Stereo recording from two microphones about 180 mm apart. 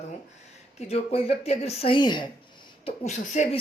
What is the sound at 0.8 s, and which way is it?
Speech, 35° left (ahead or behind).